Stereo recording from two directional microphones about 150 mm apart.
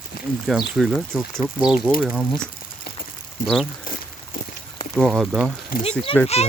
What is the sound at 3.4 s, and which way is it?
Speech, centre (ahead or behind).